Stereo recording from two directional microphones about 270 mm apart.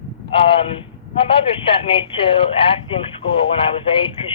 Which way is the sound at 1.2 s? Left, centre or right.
Centre.